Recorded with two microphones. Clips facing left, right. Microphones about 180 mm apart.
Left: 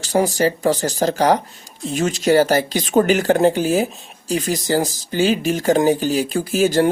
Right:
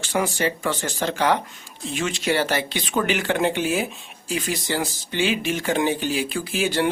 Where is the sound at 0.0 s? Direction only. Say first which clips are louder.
Left 6 dB; 40° left (ahead or behind).